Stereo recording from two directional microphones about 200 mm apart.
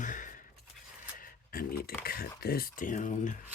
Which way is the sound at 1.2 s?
45° left (ahead or behind).